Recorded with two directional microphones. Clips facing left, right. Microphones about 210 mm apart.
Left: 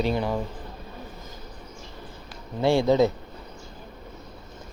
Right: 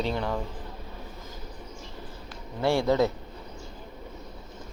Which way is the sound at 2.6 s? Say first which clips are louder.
Left 3 dB; 20° left (ahead or behind).